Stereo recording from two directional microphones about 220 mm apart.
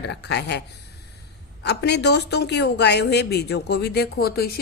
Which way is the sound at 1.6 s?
50° left (ahead or behind).